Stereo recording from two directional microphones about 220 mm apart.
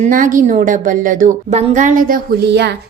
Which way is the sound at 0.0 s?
35° right (ahead or behind).